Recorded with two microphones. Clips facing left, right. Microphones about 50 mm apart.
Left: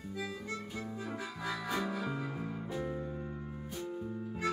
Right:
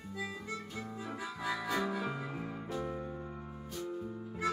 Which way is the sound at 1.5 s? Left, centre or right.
Centre.